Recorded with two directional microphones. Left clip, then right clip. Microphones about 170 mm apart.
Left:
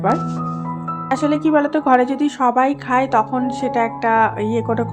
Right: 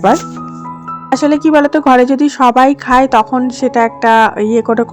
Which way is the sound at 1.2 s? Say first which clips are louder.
Right 7 dB; 40° right (ahead or behind).